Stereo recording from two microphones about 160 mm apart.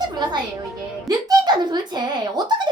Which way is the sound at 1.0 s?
25° right (ahead or behind).